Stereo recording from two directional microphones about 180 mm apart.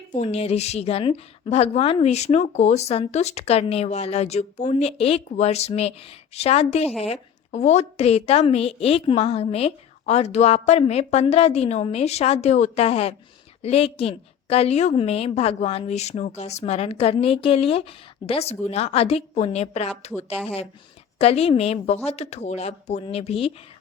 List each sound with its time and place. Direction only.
0.1 s a woman's voice: 35° left (ahead or behind)